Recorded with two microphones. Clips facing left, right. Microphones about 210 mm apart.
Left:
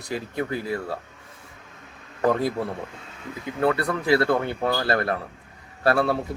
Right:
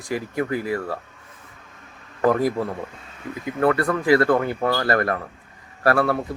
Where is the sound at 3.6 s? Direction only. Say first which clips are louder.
Right 3 dB; 10° left (ahead or behind).